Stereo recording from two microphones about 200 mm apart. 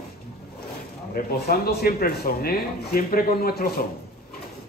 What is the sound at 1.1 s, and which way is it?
Speech, 50° left (ahead or behind).